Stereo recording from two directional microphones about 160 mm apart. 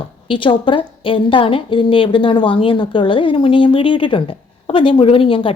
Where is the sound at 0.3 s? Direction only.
30° left (ahead or behind).